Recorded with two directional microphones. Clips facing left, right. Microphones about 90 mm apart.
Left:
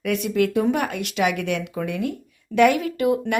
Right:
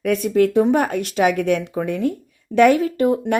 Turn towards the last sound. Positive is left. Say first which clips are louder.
# right 3 dB
turn(degrees=-35)  # may be behind; listen again after turning